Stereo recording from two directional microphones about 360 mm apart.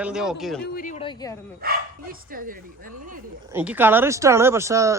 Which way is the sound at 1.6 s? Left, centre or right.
Right.